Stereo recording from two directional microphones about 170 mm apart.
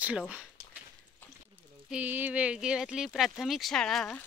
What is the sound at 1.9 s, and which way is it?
Speech, 10° right (ahead or behind).